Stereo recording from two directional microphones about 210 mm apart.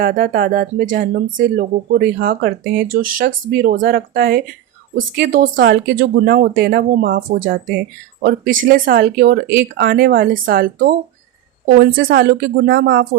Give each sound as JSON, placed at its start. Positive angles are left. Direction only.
{"t": 0.0, "sound": "speech", "side_deg": -40}